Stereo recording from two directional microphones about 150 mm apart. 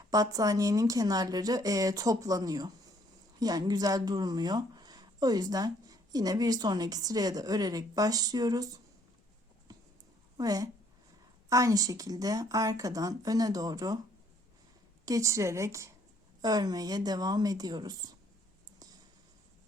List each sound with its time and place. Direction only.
0.1 s speech: 25° right (ahead or behind)
10.3 s a woman's voice: 25° right (ahead or behind)
15.0 s speech: 20° right (ahead or behind)